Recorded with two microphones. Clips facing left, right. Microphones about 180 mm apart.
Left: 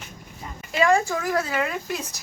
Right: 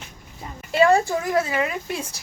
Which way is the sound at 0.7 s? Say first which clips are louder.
Right 3 dB; 35° right (ahead or behind).